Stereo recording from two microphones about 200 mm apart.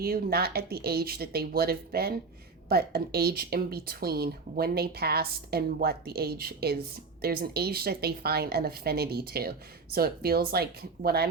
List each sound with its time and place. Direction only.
0.0 s speech: 50° right (ahead or behind)